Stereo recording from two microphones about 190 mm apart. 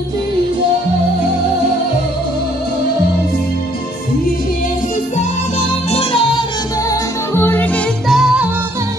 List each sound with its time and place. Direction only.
5.9 s music: 30° left (ahead or behind)
6.9 s music: 10° left (ahead or behind)